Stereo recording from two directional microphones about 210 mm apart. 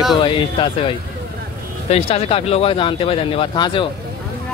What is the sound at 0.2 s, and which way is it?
Speech, 25° left (ahead or behind).